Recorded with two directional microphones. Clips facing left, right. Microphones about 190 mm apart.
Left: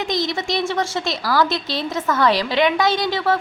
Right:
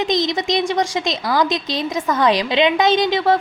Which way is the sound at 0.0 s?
20° right (ahead or behind).